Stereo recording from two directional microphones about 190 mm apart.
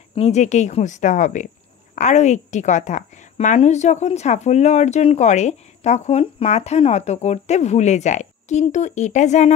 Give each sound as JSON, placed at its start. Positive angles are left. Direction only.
{"t": 0.1, "sound": "a woman's voice", "side_deg": 35}